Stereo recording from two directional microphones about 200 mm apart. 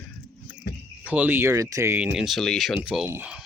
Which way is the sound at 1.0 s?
5° right (ahead or behind).